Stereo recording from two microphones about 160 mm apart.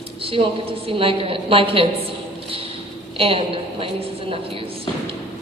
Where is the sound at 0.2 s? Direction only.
35° right (ahead or behind).